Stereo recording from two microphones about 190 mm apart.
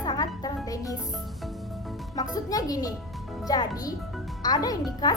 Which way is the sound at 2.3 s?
20° left (ahead or behind).